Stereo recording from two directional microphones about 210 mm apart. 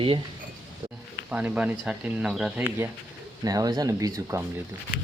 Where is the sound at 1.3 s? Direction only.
5° right (ahead or behind).